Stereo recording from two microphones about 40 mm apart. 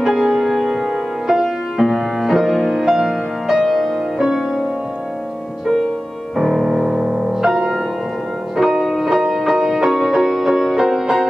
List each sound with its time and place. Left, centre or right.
0.0 s music: centre
4.2 s music: centre
6.3 s music: centre
7.5 s music: centre